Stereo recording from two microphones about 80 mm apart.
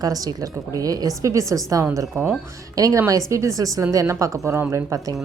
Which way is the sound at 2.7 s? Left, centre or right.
Right.